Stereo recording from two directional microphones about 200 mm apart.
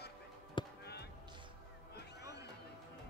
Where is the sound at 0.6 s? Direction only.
25° left (ahead or behind).